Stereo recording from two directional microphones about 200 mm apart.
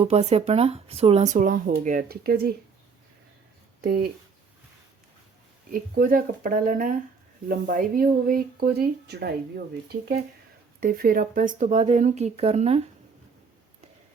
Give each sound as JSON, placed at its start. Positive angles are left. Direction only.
{"t": 0.0, "sound": "speech", "side_deg": -30}
{"t": 3.8, "sound": "speech", "side_deg": -50}
{"t": 5.7, "sound": "speech", "side_deg": -45}